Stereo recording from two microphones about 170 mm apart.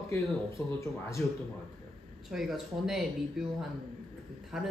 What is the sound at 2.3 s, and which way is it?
Speech, centre (ahead or behind).